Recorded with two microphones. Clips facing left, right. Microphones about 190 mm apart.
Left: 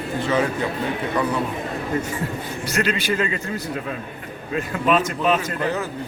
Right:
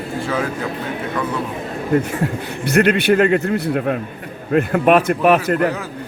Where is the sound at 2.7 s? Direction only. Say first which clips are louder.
Right 9 dB; 60° right (ahead or behind).